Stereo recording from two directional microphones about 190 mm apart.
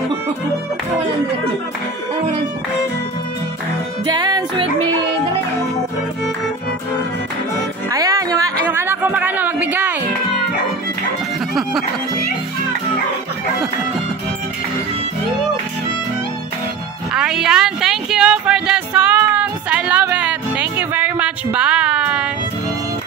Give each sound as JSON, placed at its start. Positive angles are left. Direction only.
{"t": 4.0, "sound": "music", "side_deg": -20}
{"t": 7.9, "sound": "music", "side_deg": -20}
{"t": 17.1, "sound": "music", "side_deg": -5}